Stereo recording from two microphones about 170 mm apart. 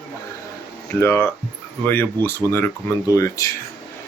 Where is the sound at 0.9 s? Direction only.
15° left (ahead or behind).